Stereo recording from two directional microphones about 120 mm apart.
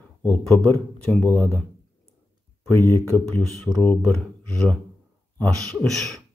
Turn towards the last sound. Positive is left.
turn(degrees=0)  # may be behind; listen again after turning